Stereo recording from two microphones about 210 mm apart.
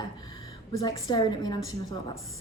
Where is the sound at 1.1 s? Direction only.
20° left (ahead or behind).